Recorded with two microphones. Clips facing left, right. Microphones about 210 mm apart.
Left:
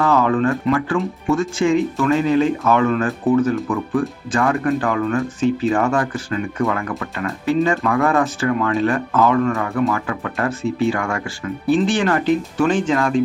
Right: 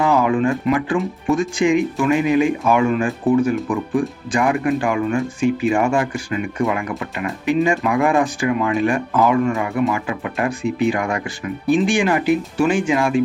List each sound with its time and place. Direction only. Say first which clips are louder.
0.0 s speech: even; 15° right (ahead or behind)